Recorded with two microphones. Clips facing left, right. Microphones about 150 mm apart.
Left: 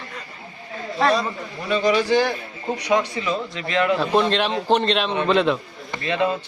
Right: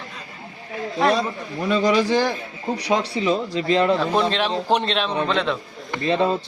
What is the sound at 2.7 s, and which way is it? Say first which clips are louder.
Speech: left 1 dB; 35° right (ahead or behind).